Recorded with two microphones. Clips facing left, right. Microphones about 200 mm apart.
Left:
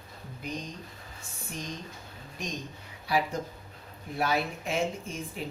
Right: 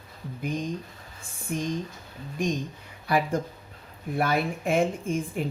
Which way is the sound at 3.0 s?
55° right (ahead or behind).